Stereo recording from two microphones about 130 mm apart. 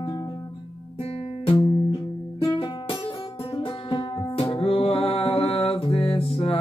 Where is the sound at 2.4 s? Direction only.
35° left (ahead or behind).